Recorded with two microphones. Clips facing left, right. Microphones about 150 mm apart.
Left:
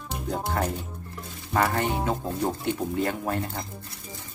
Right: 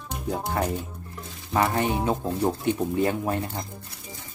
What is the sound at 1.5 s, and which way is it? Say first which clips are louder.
Speech: right 1 dB; 15° right (ahead or behind).